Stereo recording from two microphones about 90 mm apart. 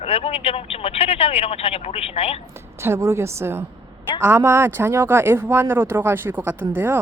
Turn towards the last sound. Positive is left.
turn(degrees=-25)  # may be behind; listen again after turning